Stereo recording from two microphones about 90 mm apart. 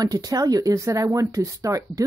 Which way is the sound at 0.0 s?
45° right (ahead or behind).